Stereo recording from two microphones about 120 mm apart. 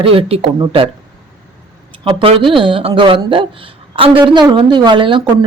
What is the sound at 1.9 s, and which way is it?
Speech, 50° right (ahead or behind).